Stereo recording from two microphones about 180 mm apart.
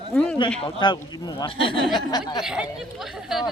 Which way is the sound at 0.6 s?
25° left (ahead or behind).